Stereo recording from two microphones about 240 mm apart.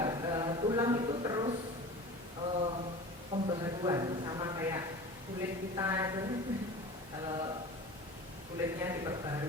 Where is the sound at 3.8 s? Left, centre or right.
Centre.